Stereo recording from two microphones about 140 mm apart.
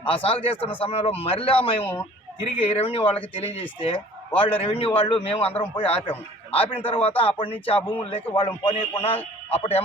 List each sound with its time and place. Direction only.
0.0 s a man's voice: 40° left (ahead or behind)